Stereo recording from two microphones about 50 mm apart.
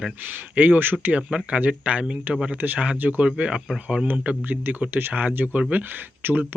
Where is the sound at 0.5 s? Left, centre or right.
Right.